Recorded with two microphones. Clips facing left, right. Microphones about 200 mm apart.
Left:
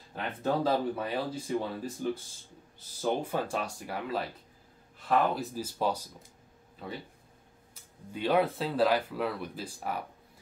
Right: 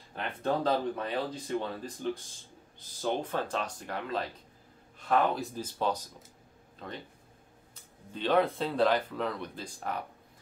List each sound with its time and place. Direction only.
0.1 s speech: 5° left (ahead or behind)